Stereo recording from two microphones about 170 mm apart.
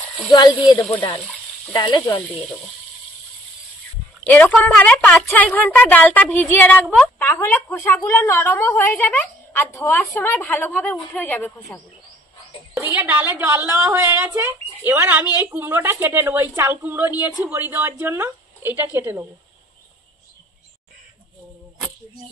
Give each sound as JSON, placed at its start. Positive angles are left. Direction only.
{"t": 0.3, "sound": "speech", "side_deg": 25}
{"t": 1.7, "sound": "speech", "side_deg": 20}
{"t": 4.2, "sound": "speech", "side_deg": 10}
{"t": 12.8, "sound": "a woman's voice", "side_deg": -10}